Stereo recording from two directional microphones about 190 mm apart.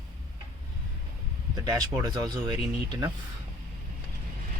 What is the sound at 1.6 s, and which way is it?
Speech, 20° right (ahead or behind).